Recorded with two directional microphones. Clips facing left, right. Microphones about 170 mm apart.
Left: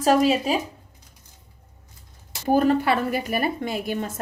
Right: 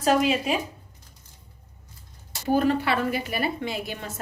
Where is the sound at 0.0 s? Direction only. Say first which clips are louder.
Left 3 dB; 40° left (ahead or behind).